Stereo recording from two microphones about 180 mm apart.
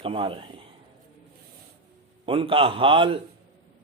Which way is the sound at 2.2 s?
30° right (ahead or behind).